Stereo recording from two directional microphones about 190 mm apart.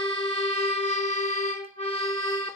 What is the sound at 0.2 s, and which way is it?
Music, 30° left (ahead or behind).